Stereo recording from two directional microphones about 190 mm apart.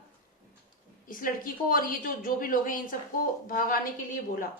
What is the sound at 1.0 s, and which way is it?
A woman's voice, 50° left (ahead or behind).